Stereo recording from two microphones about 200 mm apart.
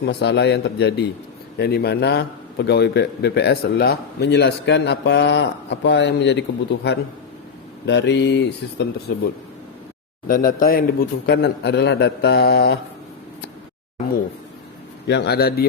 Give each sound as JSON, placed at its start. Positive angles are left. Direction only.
{"t": 0.0, "sound": "a man's voice", "side_deg": 60}
{"t": 10.2, "sound": "a man's voice", "side_deg": 45}
{"t": 11.3, "sound": "a man's voice", "side_deg": 55}
{"t": 15.0, "sound": "a man's voice", "side_deg": 60}